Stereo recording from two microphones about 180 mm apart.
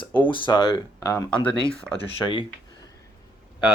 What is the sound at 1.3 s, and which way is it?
Speech, 5° left (ahead or behind).